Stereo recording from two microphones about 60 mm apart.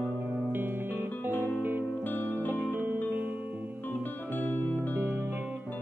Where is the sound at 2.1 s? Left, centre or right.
Left.